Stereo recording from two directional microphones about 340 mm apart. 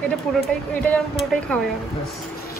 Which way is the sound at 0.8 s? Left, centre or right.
Centre.